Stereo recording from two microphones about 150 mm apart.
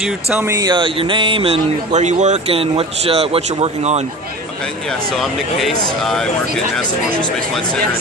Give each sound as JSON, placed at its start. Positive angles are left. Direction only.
{"t": 0.0, "sound": "speech", "side_deg": -5}
{"t": 0.4, "sound": "speech", "side_deg": -20}
{"t": 4.9, "sound": "speech", "side_deg": 0}